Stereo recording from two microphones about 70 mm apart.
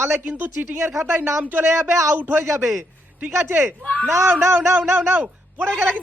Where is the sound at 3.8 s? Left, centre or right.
Centre.